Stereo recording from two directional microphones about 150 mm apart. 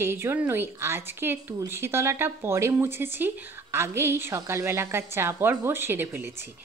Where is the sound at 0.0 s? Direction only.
15° right (ahead or behind).